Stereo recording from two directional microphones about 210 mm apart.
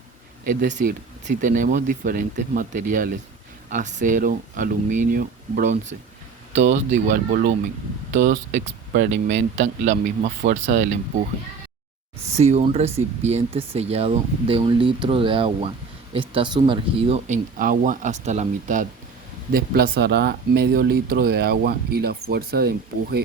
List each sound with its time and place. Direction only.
0.4 s speech: 40° right (ahead or behind)
12.3 s speech: 30° right (ahead or behind)
19.5 s speech: 45° right (ahead or behind)